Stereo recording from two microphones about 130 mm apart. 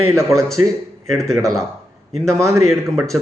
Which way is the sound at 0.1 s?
20° right (ahead or behind).